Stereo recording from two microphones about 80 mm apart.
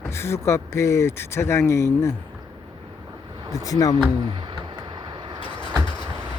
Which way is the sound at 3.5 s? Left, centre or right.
Left.